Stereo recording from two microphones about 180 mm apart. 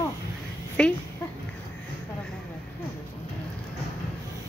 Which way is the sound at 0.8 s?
5° left (ahead or behind).